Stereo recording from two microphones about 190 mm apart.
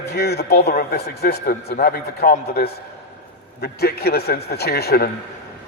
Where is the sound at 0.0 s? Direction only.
60° left (ahead or behind).